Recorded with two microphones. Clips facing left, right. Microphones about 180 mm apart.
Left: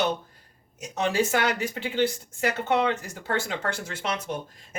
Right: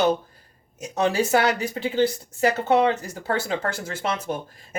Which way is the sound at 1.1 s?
35° right (ahead or behind).